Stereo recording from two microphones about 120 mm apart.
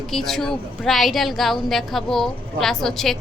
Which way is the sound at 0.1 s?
Centre (ahead or behind).